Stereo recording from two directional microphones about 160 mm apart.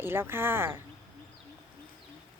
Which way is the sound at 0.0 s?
15° right (ahead or behind).